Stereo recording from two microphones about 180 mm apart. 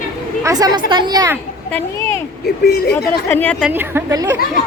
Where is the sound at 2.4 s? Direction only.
60° left (ahead or behind).